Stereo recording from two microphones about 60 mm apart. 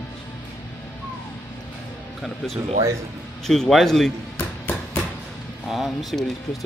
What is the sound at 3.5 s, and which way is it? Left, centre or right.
Speech, centre.